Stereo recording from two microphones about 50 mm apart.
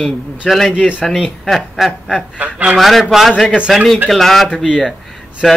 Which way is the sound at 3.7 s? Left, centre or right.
Centre.